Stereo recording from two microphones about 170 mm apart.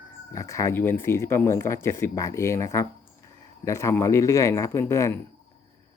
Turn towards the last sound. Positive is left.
turn(degrees=15)  # may be behind; listen again after turning